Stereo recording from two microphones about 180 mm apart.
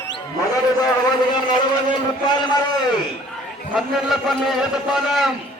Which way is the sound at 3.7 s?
Centre (ahead or behind).